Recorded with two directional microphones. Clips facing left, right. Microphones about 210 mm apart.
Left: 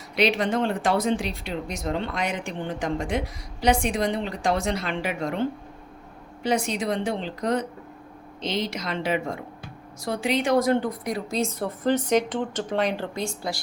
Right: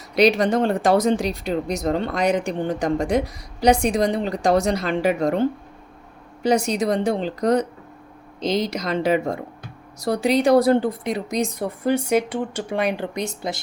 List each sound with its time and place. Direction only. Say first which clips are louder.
0.2 s a woman's voice: right 6 dB; 40° right (ahead or behind); by 13.6 s 20° right (ahead or behind)